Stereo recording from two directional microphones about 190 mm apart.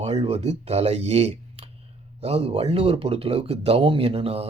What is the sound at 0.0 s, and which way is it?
Speech, 35° right (ahead or behind).